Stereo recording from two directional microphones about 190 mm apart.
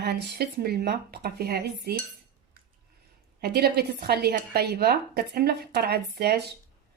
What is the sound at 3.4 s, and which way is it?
A woman's voice, 55° right (ahead or behind).